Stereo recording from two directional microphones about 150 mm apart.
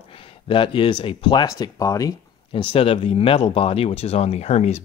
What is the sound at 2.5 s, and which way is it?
Speech, 35° left (ahead or behind).